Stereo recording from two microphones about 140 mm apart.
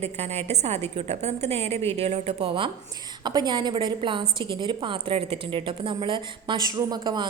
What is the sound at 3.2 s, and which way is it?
A woman's voice, 30° right (ahead or behind).